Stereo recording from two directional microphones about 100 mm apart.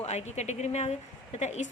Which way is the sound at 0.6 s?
90° left.